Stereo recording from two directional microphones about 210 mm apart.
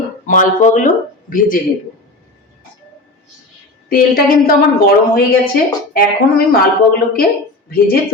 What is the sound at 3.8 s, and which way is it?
Speech, 45° left (ahead or behind).